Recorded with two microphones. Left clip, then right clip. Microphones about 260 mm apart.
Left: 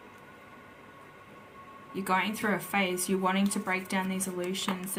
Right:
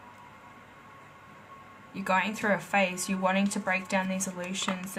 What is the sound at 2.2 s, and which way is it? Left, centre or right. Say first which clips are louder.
Speech: right 2 dB; centre.